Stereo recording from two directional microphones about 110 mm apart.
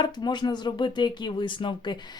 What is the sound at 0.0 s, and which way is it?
Speech, 40° left (ahead or behind).